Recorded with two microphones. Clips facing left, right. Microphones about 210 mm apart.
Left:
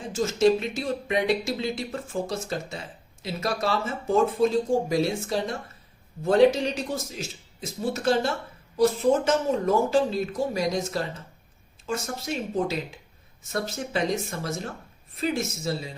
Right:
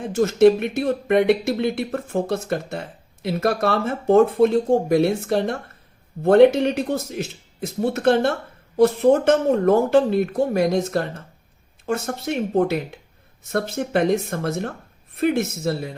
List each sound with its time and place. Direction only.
0.0 s speech: 60° right (ahead or behind)